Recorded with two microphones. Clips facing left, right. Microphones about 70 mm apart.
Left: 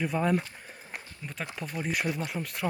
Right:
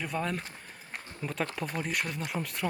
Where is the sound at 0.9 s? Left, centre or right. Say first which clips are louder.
Right 5 dB; centre.